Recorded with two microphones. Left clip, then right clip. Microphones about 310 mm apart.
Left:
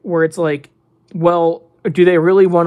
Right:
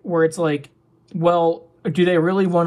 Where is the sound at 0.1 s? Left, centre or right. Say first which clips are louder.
Left 3 dB; centre.